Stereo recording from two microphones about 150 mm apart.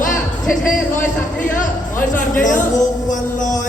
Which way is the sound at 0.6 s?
65° left (ahead or behind).